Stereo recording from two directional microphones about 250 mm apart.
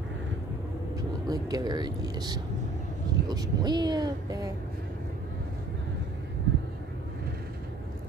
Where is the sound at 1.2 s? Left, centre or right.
Centre.